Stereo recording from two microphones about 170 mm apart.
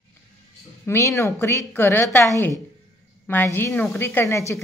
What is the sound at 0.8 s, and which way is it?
A woman's voice, 15° left (ahead or behind).